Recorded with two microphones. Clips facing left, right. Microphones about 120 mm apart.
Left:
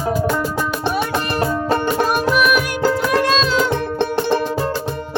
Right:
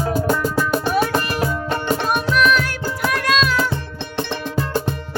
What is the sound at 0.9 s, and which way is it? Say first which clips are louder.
Music: right 3 dB; centre (ahead or behind).